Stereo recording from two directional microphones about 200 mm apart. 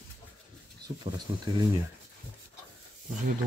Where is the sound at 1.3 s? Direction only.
15° right (ahead or behind).